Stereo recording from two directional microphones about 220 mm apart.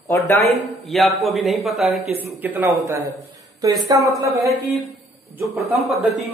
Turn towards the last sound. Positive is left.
turn(degrees=0)  # may be behind; listen again after turning